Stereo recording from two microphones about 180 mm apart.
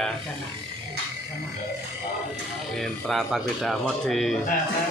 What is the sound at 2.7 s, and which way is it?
Speech, centre (ahead or behind).